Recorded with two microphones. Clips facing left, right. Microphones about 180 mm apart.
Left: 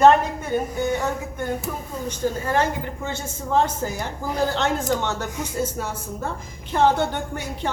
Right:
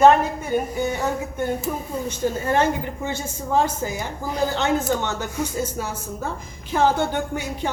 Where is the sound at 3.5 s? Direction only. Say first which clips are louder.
Even; 5° right (ahead or behind).